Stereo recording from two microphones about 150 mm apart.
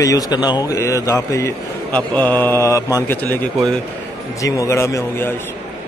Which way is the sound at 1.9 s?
10° left (ahead or behind).